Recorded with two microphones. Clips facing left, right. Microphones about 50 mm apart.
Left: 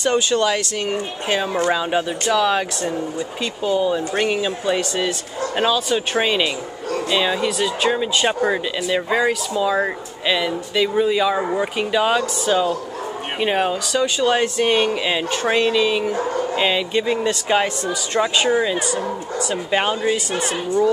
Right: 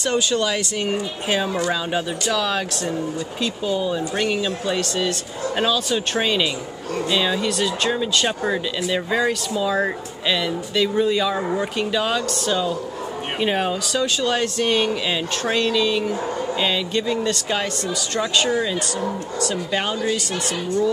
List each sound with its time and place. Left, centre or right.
0.0 s speech: centre
0.6 s speech: centre
1.7 s speech: centre